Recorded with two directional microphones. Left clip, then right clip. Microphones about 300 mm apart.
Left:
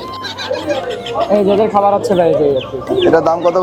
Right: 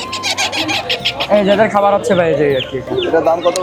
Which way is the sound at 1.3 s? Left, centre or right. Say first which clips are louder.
Right 1 dB; right.